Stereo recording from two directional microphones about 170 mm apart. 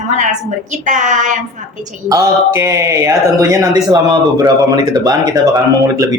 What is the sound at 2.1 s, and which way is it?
Speech, 20° right (ahead or behind).